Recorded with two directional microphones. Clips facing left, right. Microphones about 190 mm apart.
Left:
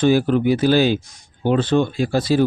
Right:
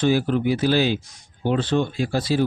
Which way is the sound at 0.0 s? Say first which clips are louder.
Left 4 dB; 50° left (ahead or behind).